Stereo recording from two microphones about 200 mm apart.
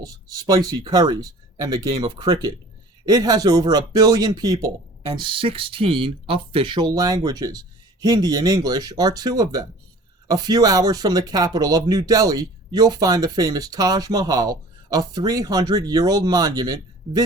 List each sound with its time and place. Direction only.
0.0 s speech: 20° right (ahead or behind)